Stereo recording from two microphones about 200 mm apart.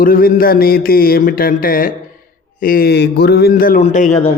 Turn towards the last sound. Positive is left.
turn(degrees=35)  # may be behind; listen again after turning